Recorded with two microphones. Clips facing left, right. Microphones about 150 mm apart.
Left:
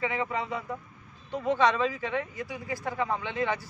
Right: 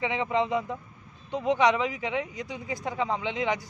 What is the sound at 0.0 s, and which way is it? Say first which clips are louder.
Speech: right 4 dB; 20° right (ahead or behind).